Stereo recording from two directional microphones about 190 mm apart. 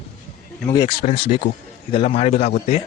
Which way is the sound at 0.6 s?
20° left (ahead or behind).